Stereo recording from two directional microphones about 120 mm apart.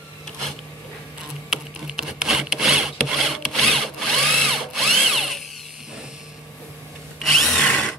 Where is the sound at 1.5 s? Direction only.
5° right (ahead or behind).